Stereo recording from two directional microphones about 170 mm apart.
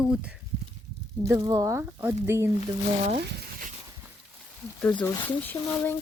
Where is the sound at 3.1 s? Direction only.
70° right (ahead or behind).